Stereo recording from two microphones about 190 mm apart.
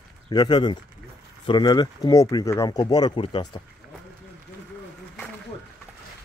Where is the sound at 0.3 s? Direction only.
20° left (ahead or behind).